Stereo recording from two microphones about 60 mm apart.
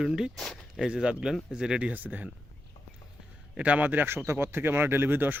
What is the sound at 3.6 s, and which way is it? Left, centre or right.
Speech, right.